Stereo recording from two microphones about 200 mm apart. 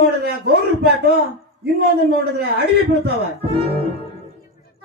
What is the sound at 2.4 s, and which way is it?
Speech, 50° right (ahead or behind).